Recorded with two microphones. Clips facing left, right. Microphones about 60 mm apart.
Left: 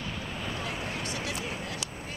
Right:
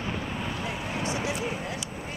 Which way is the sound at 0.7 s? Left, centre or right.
Right.